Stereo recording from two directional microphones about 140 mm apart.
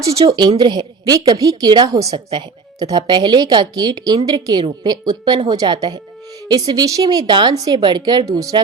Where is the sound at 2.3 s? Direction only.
30° right (ahead or behind).